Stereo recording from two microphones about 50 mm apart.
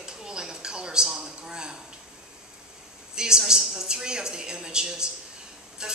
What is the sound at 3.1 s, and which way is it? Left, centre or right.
Speech, centre.